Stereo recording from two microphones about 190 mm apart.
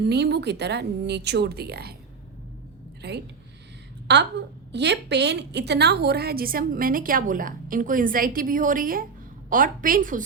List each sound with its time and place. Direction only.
0.0 s speech: 60° right (ahead or behind)
3.0 s a woman's voice: 60° right (ahead or behind)